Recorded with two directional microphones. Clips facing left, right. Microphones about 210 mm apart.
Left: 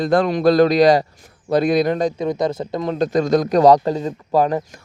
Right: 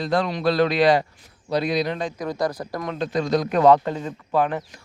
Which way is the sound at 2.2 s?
20° left (ahead or behind).